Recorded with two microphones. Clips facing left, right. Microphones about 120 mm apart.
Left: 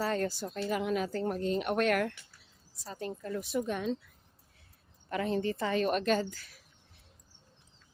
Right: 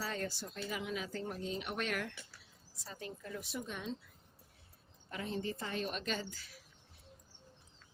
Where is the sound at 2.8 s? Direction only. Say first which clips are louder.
Left 8 dB; 40° left (ahead or behind); by 3.9 s 65° left (ahead or behind).